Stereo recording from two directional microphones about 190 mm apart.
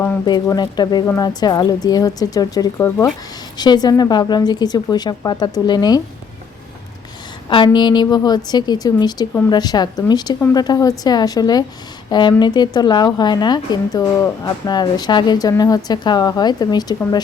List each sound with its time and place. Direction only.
0.3 s speech: 20° left (ahead or behind)
7.5 s speech: 25° left (ahead or behind)